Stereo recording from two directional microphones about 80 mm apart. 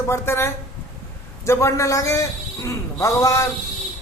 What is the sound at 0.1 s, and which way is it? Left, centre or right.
A man's voice, left.